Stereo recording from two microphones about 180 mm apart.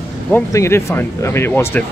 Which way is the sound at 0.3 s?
15° left (ahead or behind).